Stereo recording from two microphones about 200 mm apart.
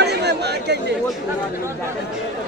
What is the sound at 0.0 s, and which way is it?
Chatter, 55° right (ahead or behind).